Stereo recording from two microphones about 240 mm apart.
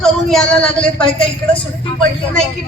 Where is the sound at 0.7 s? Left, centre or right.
Left.